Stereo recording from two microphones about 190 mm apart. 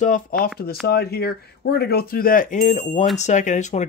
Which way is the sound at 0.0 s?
45° left (ahead or behind).